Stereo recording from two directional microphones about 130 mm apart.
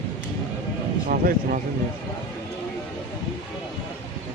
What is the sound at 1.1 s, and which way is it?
Speech, 90° right.